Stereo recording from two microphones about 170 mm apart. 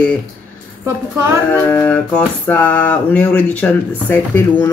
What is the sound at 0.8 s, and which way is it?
Speech, 15° right (ahead or behind).